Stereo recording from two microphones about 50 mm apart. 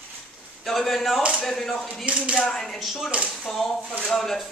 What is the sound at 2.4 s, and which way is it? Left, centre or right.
A man's voice, centre.